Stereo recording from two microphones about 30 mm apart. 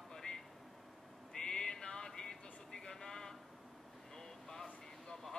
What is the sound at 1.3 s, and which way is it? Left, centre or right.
Music, left.